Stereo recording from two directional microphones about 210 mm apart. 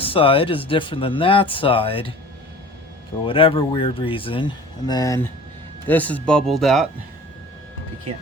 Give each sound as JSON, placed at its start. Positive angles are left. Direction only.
{"t": 0.0, "sound": "speech", "side_deg": 25}
{"t": 3.2, "sound": "speech", "side_deg": 25}